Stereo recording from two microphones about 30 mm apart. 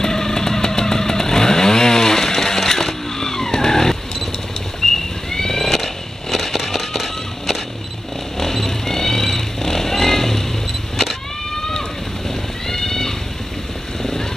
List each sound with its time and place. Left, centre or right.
0.0 s chainsaw: centre
4.8 s a sound: centre
6.3 s fireworks: centre
8.4 s vehicle: centre
11.5 s vehicle: centre
12.6 s cat: centre